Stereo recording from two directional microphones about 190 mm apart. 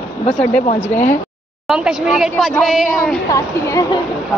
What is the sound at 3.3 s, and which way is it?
Speech, 15° left (ahead or behind).